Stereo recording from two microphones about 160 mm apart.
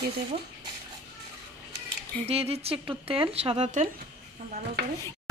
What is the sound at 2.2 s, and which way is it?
Speech, 40° right (ahead or behind).